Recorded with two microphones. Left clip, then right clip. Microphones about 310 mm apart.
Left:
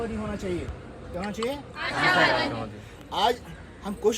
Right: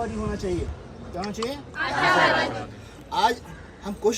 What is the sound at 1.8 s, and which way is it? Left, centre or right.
Speech, right.